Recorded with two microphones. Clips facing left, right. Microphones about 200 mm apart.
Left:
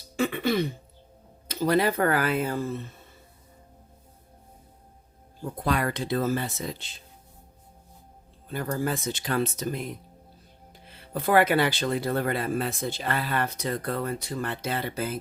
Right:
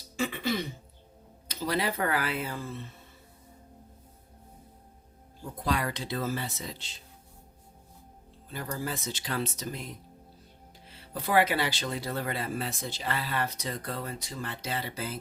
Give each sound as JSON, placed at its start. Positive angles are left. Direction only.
{"t": 0.2, "sound": "throat clearing", "side_deg": 60}
{"t": 1.5, "sound": "speech", "side_deg": 50}
{"t": 5.6, "sound": "speech", "side_deg": 55}
{"t": 8.5, "sound": "speech", "side_deg": 55}